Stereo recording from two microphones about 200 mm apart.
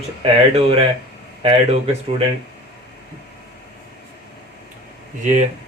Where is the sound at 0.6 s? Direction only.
30° right (ahead or behind).